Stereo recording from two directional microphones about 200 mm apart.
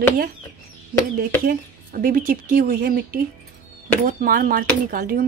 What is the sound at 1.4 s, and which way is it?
Speech, 50° right (ahead or behind).